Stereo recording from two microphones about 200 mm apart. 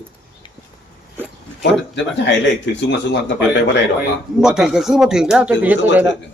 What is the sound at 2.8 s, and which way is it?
Speech, 60° left (ahead or behind).